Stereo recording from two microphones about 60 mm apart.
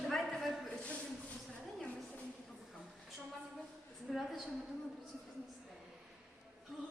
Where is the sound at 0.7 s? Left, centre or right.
Centre.